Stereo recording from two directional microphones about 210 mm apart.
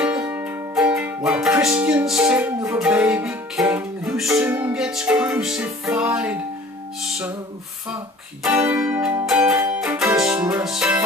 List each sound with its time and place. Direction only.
0.0 s music: 10° right (ahead or behind)
8.5 s music: 5° right (ahead or behind)